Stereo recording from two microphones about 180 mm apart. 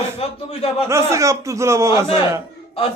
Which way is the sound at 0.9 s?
15° right (ahead or behind).